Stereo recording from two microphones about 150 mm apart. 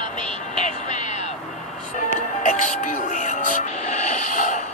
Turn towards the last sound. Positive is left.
turn(degrees=60)  # may be behind; listen again after turning